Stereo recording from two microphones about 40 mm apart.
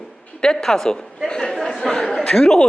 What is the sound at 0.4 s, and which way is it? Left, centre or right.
A man's voice, centre.